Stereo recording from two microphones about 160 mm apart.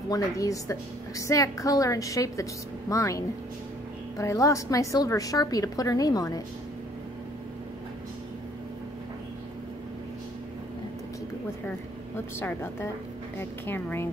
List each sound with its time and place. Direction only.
0.1 s a woman's voice: 20° left (ahead or behind)
13.4 s a woman's voice: 15° left (ahead or behind)